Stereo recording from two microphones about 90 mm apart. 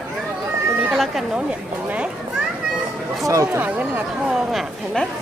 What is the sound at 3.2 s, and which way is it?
Speech, 40° right (ahead or behind).